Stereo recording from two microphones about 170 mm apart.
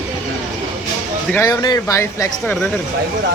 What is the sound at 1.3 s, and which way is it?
Speech, 20° left (ahead or behind).